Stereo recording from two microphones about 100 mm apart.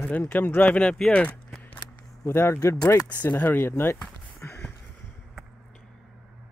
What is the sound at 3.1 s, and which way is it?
Speech, 15° left (ahead or behind).